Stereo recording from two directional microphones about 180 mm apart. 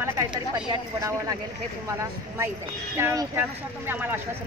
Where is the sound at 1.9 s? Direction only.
15° right (ahead or behind).